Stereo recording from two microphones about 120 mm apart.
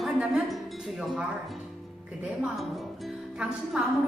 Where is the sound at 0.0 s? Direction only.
5° right (ahead or behind).